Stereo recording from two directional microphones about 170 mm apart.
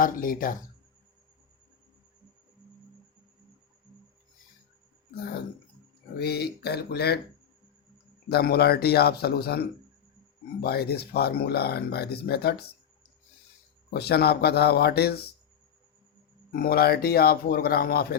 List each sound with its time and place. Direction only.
0.0 s speech: 55° left (ahead or behind)
6.1 s speech: 70° left (ahead or behind)
8.3 s speech: 70° left (ahead or behind)
13.9 s speech: 70° left (ahead or behind)
16.5 s speech: 60° left (ahead or behind)